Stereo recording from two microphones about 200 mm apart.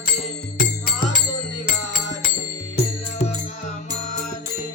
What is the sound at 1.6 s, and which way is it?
Music, 50° left (ahead or behind).